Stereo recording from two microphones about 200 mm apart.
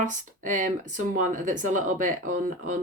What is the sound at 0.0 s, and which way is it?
Speech, 40° right (ahead or behind).